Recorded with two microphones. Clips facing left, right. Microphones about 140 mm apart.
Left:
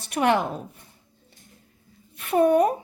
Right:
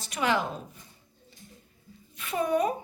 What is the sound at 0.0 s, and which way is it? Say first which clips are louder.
Speech: left 6 dB; 60° left (ahead or behind).